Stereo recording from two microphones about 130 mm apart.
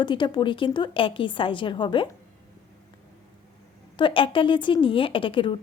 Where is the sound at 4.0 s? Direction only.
40° left (ahead or behind).